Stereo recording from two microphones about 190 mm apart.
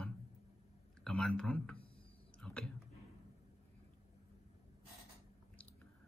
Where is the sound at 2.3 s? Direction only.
5° left (ahead or behind).